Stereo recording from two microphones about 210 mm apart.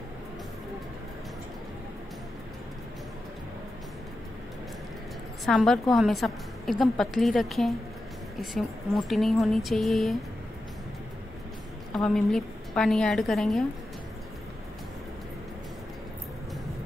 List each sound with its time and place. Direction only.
5.4 s a woman's voice: centre (ahead or behind)
11.9 s a woman's voice: 5° left (ahead or behind)